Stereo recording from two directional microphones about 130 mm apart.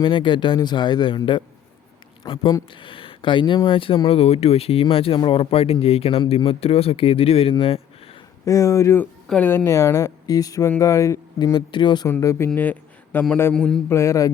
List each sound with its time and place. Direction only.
0.0 s speech: 40° left (ahead or behind)
8.4 s speech: 25° left (ahead or behind)
9.2 s a woman's voice: 5° left (ahead or behind)
9.5 s speech: 20° left (ahead or behind)
11.5 s speech: 35° left (ahead or behind)
12.0 s speech: 20° left (ahead or behind)
13.5 s mantra: 5° left (ahead or behind)
13.9 s speech: 20° left (ahead or behind)